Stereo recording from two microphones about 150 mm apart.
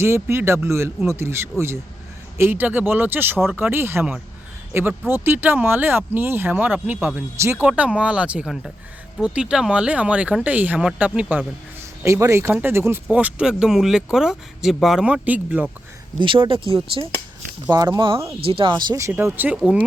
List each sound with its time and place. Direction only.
0.0 s speech: 15° right (ahead or behind)
16.1 s speech: 35° right (ahead or behind)
17.7 s speech: 25° right (ahead or behind); by 19.8 s 10° right (ahead or behind)